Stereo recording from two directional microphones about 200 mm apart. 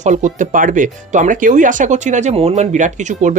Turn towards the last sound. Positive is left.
turn(degrees=-40)  # may be behind; listen again after turning